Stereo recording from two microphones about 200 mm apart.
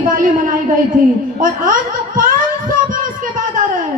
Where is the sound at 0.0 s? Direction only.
45° right (ahead or behind).